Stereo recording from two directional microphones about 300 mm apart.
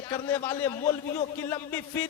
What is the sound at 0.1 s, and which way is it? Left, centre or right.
A man's voice, centre.